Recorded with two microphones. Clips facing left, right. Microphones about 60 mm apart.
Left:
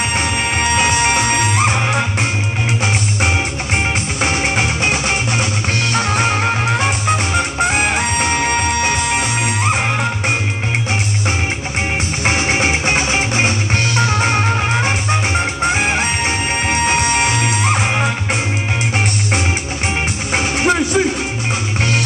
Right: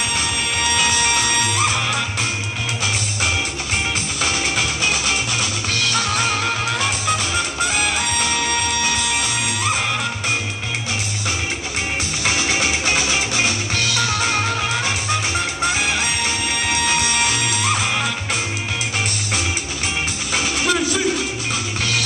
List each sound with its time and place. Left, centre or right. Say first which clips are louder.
0.1 s music: left 5 dB; left
3.7 s music: left 5 dB; left
12.3 s music: left 4 dB; left
20.3 s music: left 4 dB; left